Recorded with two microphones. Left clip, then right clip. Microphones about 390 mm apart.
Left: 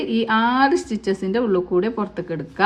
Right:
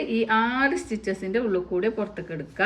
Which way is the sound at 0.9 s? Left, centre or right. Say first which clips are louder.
Left 4 dB; centre.